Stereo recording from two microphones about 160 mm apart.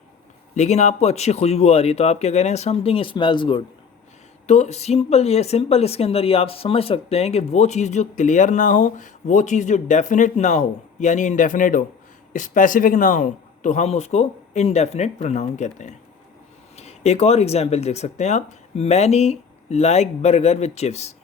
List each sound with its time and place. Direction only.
0.5 s speech: 45° left (ahead or behind)
4.4 s speech: 45° left (ahead or behind)